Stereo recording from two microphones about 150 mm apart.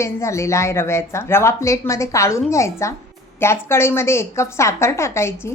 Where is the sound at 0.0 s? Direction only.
20° left (ahead or behind).